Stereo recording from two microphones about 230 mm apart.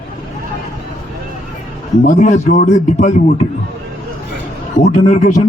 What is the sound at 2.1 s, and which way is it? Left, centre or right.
A man's voice, left.